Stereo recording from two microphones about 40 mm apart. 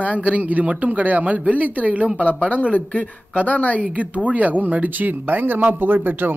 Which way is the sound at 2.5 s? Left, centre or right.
Left.